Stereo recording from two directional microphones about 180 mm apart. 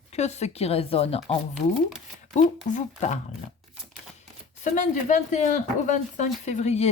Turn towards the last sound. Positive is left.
turn(degrees=40)  # may be behind; listen again after turning